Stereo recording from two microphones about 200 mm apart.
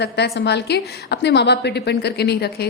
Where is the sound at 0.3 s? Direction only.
55° left (ahead or behind).